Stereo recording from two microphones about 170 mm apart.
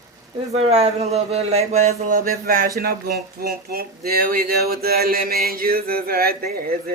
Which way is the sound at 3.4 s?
65° right (ahead or behind).